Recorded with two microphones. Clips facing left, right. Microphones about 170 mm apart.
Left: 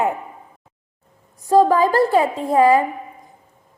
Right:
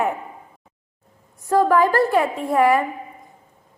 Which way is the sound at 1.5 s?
30° left (ahead or behind).